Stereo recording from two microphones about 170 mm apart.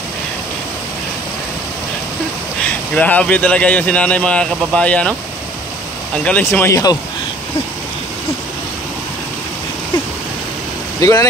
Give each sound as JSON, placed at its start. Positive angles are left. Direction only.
{"t": 2.6, "sound": "speech", "side_deg": 10}
{"t": 6.2, "sound": "speech", "side_deg": 10}
{"t": 11.0, "sound": "speech", "side_deg": 20}